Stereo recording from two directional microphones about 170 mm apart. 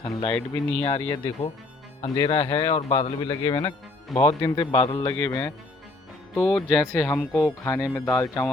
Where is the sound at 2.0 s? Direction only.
20° left (ahead or behind).